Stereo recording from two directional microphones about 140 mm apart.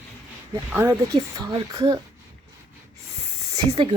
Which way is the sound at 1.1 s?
25° right (ahead or behind).